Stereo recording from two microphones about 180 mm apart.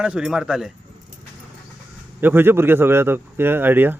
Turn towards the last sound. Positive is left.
turn(degrees=-10)  # may be behind; listen again after turning